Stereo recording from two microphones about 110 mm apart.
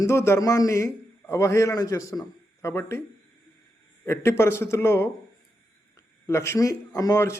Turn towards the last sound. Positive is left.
turn(degrees=30)  # may be behind; listen again after turning